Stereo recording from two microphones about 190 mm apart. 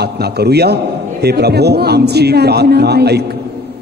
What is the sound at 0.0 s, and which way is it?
A man's voice, 60° right (ahead or behind).